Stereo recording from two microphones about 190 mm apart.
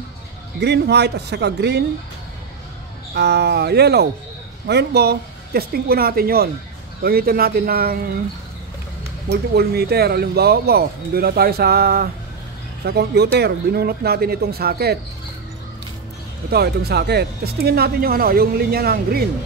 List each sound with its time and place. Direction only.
0.6 s speech: 60° right (ahead or behind)
3.2 s speech: 60° right (ahead or behind)
9.3 s speech: 55° right (ahead or behind)
16.4 s speech: 55° right (ahead or behind)